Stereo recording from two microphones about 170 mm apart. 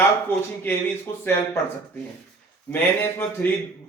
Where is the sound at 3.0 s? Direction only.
10° left (ahead or behind).